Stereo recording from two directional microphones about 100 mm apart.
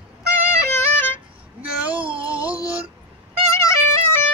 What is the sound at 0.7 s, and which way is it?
Music, 25° left (ahead or behind).